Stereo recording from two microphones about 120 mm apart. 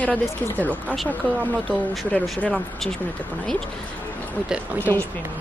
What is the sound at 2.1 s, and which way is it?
Speech, 5° left (ahead or behind).